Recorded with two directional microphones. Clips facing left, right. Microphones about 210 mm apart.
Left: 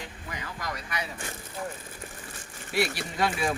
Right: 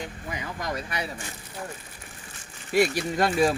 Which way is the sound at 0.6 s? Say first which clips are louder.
Right 4 dB; 25° right (ahead or behind).